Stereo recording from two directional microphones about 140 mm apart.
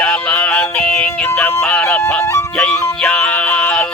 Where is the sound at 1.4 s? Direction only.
10° left (ahead or behind).